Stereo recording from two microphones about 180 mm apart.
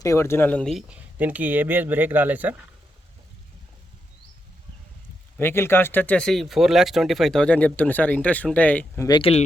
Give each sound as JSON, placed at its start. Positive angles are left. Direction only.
{"t": 0.0, "sound": "speech", "side_deg": 15}
{"t": 5.4, "sound": "speech", "side_deg": 15}
{"t": 9.0, "sound": "speech", "side_deg": 25}